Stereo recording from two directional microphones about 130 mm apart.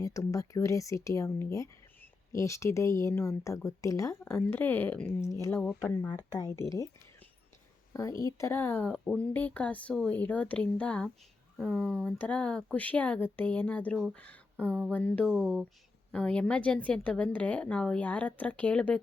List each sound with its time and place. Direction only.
0.0 s speech: 25° left (ahead or behind)
5.3 s speech: 25° left (ahead or behind)
7.9 s a woman's voice: 25° left (ahead or behind)
14.7 s a sound: 15° right (ahead or behind)
14.9 s music: 10° left (ahead or behind)
16.1 s a woman's voice: 10° left (ahead or behind)